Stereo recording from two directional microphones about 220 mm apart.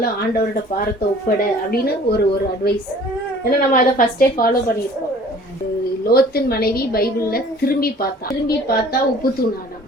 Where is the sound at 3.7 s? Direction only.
40° left (ahead or behind).